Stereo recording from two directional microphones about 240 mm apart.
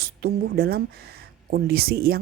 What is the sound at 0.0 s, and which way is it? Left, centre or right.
Speech, right.